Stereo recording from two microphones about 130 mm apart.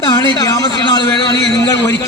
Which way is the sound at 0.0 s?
30° left (ahead or behind).